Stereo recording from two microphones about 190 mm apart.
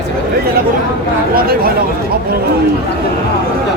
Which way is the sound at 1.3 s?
50° right (ahead or behind).